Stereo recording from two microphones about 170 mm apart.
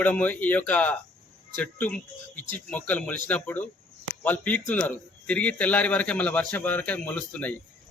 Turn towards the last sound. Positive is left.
turn(degrees=10)  # may be behind; listen again after turning